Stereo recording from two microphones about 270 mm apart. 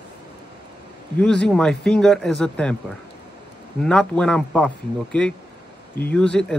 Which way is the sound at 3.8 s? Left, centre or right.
Centre.